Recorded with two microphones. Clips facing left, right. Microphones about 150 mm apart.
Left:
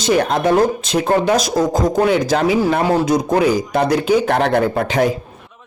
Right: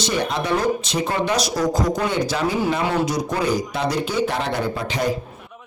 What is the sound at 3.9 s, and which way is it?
Speech, 65° left (ahead or behind).